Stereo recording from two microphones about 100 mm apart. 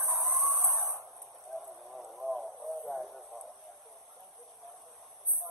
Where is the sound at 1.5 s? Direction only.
Centre (ahead or behind).